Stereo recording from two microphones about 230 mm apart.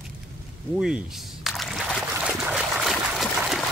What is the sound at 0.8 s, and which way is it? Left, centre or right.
Trickle, centre.